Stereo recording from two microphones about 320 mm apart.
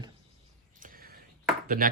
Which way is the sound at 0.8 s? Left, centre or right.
Right.